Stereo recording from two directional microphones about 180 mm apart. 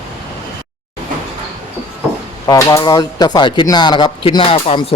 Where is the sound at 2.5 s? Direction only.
20° left (ahead or behind).